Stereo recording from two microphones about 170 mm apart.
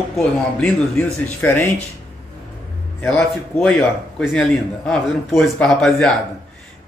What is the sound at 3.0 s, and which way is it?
Speech, centre (ahead or behind).